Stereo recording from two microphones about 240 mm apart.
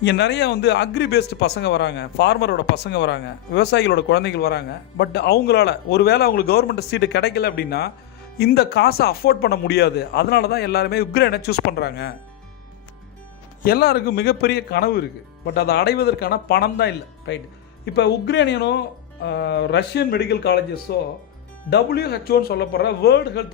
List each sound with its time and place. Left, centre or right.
0.0 s speech: left
13.7 s speech: left